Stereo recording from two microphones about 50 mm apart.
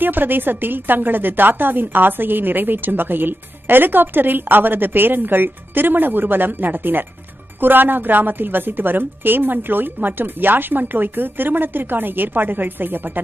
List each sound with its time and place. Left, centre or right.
0.0 s a woman's voice: right